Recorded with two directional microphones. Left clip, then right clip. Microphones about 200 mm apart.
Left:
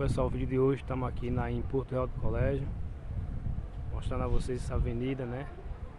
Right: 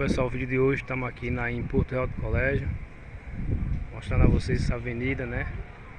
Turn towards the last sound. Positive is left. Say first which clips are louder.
# right 5 dB
turn(degrees=0)  # may be behind; listen again after turning